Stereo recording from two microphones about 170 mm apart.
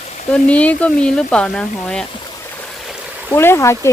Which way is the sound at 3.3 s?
15° left (ahead or behind).